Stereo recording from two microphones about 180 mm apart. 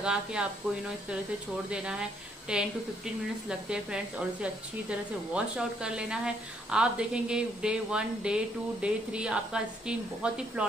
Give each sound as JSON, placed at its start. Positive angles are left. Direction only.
{"t": 0.0, "sound": "speech", "side_deg": -5}
{"t": 1.7, "sound": "speech", "side_deg": -5}